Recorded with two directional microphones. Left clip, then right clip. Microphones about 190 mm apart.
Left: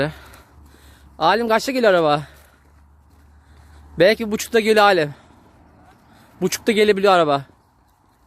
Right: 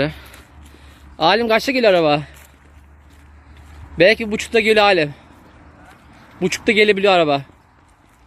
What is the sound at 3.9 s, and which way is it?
Speech, 25° left (ahead or behind).